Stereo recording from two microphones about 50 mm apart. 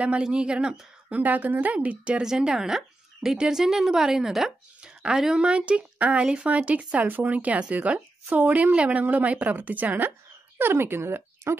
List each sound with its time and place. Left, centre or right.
0.0 s speech: right
1.2 s a woman's voice: right
2.2 s a woman's voice: centre; by 11.5 s right